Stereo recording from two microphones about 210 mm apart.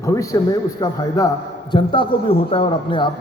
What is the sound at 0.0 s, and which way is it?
A man's voice, 15° left (ahead or behind).